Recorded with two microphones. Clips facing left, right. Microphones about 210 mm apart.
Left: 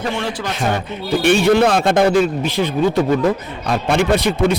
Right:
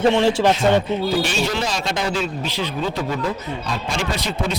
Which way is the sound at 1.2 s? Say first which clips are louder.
Left 10 dB; 60° left (ahead or behind).